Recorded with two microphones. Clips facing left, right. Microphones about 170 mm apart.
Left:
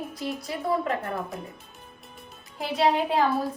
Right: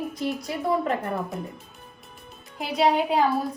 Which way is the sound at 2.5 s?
Centre (ahead or behind).